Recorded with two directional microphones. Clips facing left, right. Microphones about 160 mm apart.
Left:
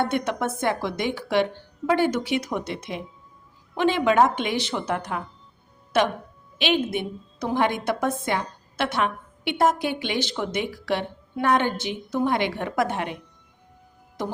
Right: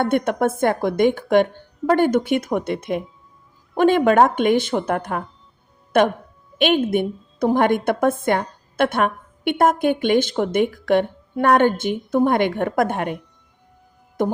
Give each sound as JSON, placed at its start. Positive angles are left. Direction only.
{"t": 0.0, "sound": "a woman's voice", "side_deg": -50}
{"t": 14.2, "sound": "music", "side_deg": -50}